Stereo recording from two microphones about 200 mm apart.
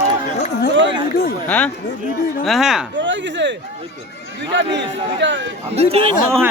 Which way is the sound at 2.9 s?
65° right (ahead or behind).